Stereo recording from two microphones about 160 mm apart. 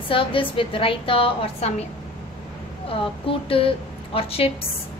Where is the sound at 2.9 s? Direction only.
35° left (ahead or behind).